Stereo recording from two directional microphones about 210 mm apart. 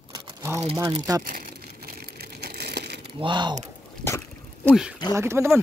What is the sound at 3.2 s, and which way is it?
Speech, 20° right (ahead or behind).